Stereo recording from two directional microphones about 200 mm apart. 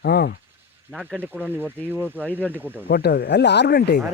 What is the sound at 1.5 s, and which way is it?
Speech, 10° right (ahead or behind).